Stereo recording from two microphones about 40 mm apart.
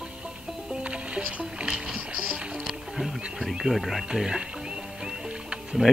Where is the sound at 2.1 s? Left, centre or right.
Right.